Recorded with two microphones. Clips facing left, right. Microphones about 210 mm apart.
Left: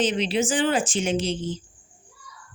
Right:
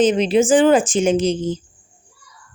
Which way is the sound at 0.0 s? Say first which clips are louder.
Right 8 dB; 45° right (ahead or behind).